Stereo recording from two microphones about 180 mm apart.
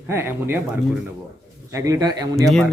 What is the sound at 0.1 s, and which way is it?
Speech, 15° right (ahead or behind).